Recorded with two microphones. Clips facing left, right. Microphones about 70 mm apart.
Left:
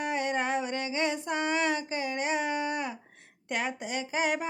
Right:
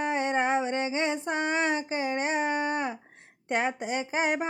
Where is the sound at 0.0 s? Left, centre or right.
Right.